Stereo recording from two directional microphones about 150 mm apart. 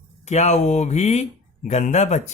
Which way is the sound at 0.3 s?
50° left (ahead or behind).